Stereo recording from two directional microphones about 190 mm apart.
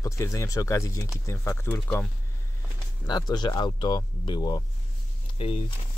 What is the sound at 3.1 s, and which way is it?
Speech, 20° left (ahead or behind).